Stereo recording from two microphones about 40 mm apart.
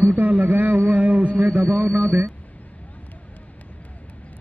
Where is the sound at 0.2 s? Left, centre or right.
Right.